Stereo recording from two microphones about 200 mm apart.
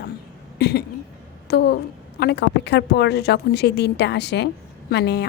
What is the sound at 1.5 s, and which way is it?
A woman's voice, 55° left (ahead or behind).